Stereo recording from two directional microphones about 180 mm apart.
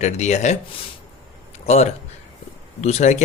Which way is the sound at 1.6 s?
35° left (ahead or behind).